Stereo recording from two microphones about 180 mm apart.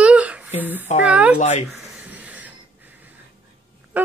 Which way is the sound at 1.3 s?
40° left (ahead or behind).